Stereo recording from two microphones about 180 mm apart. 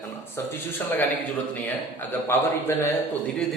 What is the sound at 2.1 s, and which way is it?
Speech, 10° left (ahead or behind).